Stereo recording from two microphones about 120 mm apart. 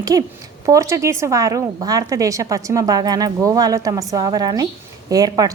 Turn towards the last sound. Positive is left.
turn(degrees=-30)  # may be behind; listen again after turning